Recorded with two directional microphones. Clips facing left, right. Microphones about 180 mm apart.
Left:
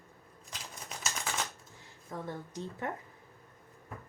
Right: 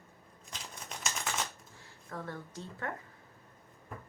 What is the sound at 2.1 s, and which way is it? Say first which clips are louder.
Speech: left 2 dB; 15° left (ahead or behind).